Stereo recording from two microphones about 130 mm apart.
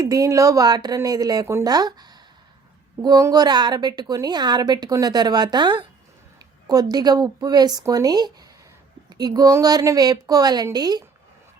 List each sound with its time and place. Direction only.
0.0 s a woman's voice: 30° right (ahead or behind)